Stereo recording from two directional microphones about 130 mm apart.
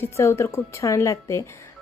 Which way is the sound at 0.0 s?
20° left (ahead or behind).